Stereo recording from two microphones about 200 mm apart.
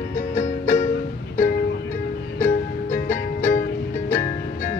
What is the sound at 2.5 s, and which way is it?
Music, 40° left (ahead or behind).